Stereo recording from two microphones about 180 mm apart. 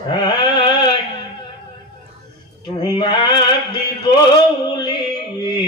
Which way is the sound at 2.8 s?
25° left (ahead or behind).